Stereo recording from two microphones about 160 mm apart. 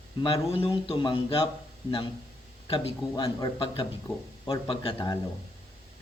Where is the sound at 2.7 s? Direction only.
30° left (ahead or behind).